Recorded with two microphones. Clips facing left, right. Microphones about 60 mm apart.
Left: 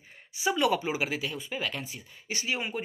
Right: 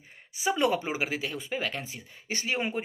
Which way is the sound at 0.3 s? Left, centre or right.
Right.